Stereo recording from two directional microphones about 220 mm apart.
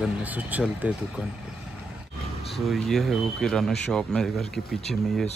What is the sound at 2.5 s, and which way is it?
Speech, centre (ahead or behind).